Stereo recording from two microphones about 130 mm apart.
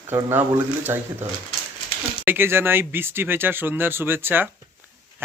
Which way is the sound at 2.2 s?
15° right (ahead or behind).